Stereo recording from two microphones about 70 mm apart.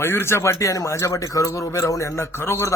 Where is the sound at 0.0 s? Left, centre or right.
Left.